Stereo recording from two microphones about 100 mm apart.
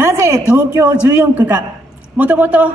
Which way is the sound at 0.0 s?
25° right (ahead or behind).